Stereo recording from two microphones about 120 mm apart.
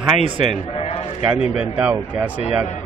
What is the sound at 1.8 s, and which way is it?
Speech, 15° right (ahead or behind).